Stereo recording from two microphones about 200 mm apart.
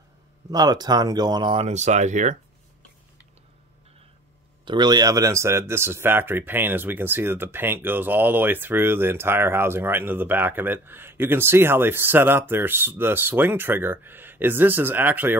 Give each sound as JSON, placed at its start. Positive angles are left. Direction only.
{"t": 0.5, "sound": "speech", "side_deg": -20}
{"t": 4.6, "sound": "speech", "side_deg": -20}